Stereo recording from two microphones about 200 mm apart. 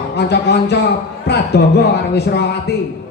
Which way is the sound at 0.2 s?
55° left (ahead or behind).